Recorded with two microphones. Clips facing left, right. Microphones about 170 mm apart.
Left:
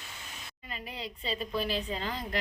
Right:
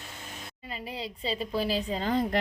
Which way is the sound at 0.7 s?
30° right (ahead or behind).